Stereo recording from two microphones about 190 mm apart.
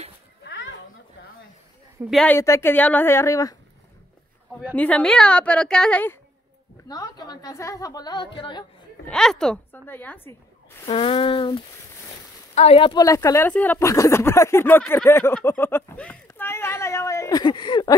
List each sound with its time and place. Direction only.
0.4 s a sound: 70° left (ahead or behind)
2.0 s a woman's voice: centre (ahead or behind)
2.3 s speech: 15° left (ahead or behind)
4.7 s a woman's voice: 5° left (ahead or behind)
6.9 s a woman's voice: 20° left (ahead or behind)
9.0 s speech: 5° left (ahead or behind)
10.9 s a woman's voice: 30° left (ahead or behind)